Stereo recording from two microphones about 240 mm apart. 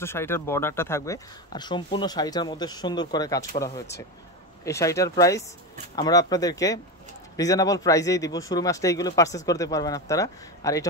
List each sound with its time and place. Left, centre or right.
0.0 s speech: centre